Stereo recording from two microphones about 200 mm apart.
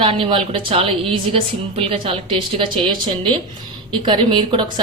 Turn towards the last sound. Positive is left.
turn(degrees=-25)  # may be behind; listen again after turning